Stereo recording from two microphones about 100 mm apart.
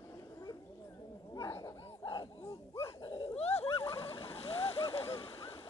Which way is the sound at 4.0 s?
60° left (ahead or behind).